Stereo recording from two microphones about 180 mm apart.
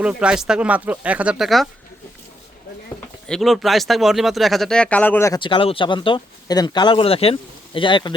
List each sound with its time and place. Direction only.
0.0 s speech: 5° right (ahead or behind)
3.2 s speech: centre (ahead or behind)
5.4 s speech: 30° left (ahead or behind)